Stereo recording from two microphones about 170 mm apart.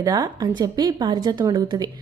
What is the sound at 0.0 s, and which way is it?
A woman's voice, 20° right (ahead or behind).